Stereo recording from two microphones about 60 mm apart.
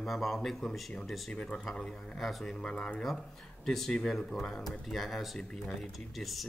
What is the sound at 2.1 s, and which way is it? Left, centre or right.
Speech, centre.